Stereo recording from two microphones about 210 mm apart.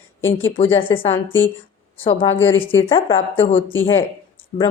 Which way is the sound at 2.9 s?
25° left (ahead or behind).